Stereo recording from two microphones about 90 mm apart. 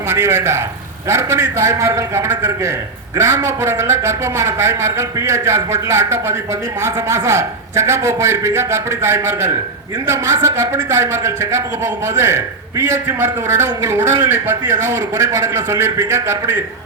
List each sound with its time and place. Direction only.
0.1 s a man's voice: 30° right (ahead or behind)